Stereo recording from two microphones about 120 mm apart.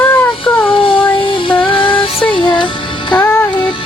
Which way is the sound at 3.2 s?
20° left (ahead or behind).